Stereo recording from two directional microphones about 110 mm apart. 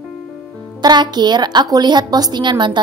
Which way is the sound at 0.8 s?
40° right (ahead or behind).